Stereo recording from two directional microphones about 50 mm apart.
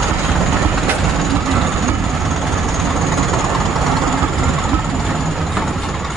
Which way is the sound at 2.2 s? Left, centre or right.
Centre.